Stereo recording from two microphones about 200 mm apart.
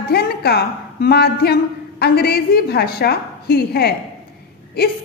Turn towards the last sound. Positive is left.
turn(degrees=50)  # may be behind; listen again after turning